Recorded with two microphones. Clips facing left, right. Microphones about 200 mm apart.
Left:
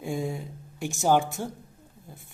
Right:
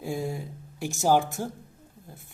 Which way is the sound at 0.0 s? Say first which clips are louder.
Even; centre (ahead or behind).